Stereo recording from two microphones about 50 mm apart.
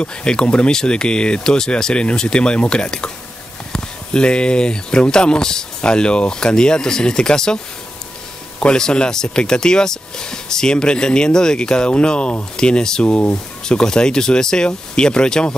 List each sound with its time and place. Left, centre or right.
0.0 s speech: centre